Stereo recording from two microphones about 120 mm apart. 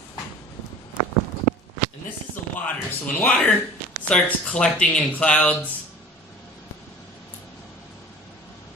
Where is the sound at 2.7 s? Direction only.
15° left (ahead or behind).